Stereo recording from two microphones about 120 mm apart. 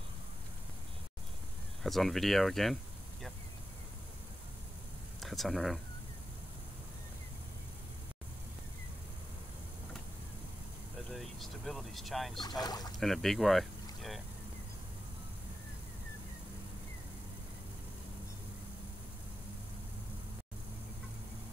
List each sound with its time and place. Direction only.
1.8 s speech: centre (ahead or behind)
5.2 s speech: centre (ahead or behind)
11.0 s vehicle: centre (ahead or behind)
12.4 s speech: 35° left (ahead or behind)
13.0 s speech: centre (ahead or behind)